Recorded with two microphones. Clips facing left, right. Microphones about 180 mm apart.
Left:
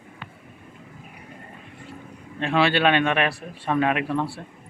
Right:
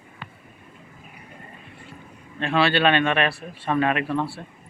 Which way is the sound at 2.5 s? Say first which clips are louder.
Even; 15° left (ahead or behind).